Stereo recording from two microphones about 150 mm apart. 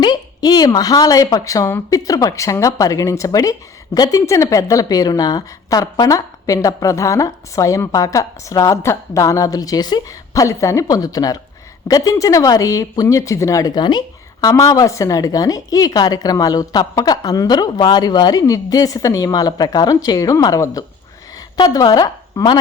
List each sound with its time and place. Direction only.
0.0 s a woman's voice: 30° left (ahead or behind)